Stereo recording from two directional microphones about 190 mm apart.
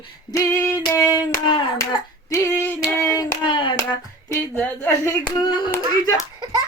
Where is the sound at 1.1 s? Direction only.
20° left (ahead or behind).